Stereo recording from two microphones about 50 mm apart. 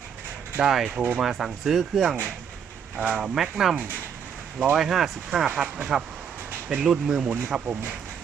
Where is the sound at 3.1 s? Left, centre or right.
Centre.